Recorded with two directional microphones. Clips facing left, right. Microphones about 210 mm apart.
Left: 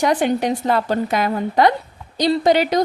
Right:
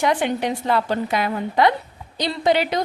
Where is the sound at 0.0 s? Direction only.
40° left (ahead or behind).